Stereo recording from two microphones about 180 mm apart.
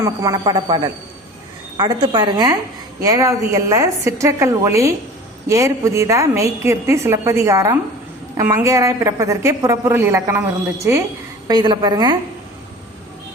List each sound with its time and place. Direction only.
0.0 s a woman's voice: 20° right (ahead or behind)
11.4 s speech: 25° right (ahead or behind)